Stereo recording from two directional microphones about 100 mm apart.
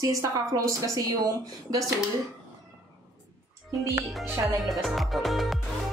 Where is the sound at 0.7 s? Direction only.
35° right (ahead or behind).